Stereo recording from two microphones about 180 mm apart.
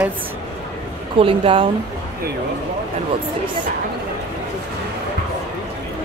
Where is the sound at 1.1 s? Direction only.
30° right (ahead or behind).